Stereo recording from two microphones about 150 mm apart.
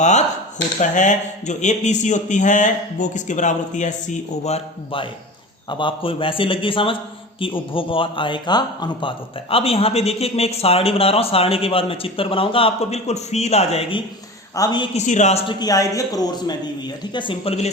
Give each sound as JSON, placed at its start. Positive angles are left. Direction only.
{"t": 0.0, "sound": "a man's voice", "side_deg": 50}
{"t": 14.5, "sound": "speech", "side_deg": 25}
{"t": 14.9, "sound": "a woman's voice", "side_deg": 55}
{"t": 15.5, "sound": "a man's voice", "side_deg": 25}